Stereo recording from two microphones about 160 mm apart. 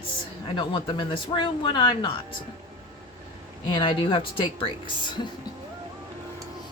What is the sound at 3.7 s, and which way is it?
A woman's voice, 30° left (ahead or behind).